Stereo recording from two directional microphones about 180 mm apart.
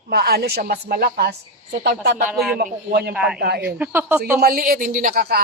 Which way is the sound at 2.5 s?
60° right (ahead or behind).